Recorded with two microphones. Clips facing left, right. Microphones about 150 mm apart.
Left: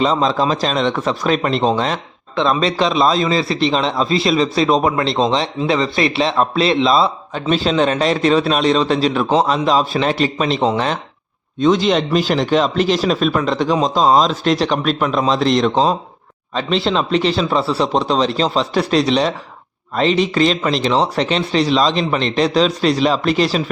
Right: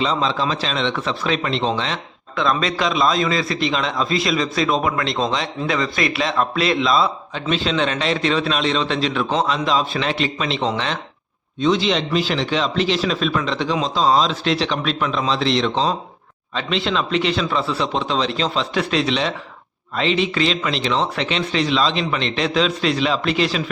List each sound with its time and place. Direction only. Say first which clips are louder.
0.0 s a man's voice: left 5 dB; 45° left (ahead or behind)
2.3 s a man's voice: left 4 dB; 30° left (ahead or behind)
7.3 s a man's voice: left 5 dB; 40° left (ahead or behind)